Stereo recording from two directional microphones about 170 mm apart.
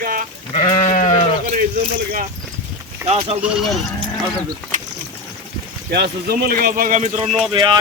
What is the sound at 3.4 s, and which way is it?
Speech, centre (ahead or behind).